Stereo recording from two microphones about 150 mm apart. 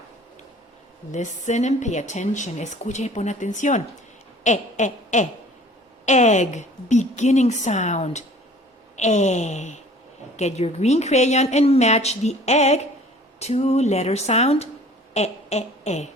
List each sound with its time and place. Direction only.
1.1 s speech: 55° left (ahead or behind)
4.4 s a sound: 50° left (ahead or behind)
6.1 s speech: 50° left (ahead or behind)